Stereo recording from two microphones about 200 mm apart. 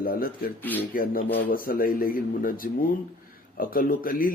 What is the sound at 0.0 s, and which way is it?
A man's voice, 45° left (ahead or behind).